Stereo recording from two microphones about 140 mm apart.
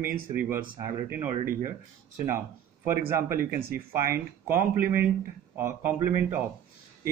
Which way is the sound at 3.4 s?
90° right.